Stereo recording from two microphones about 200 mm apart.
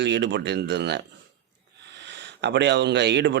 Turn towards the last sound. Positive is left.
turn(degrees=-60)  # may be behind; listen again after turning